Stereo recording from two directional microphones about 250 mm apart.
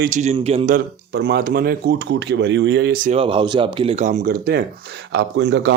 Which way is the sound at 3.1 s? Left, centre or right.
Right.